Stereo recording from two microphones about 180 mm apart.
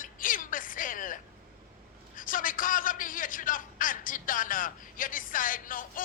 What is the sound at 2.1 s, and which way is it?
A man's voice, 50° left (ahead or behind).